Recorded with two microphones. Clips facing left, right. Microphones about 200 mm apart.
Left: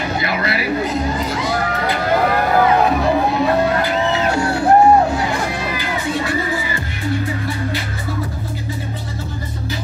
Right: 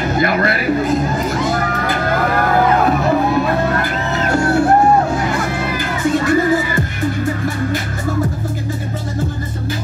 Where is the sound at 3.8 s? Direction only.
50° right (ahead or behind).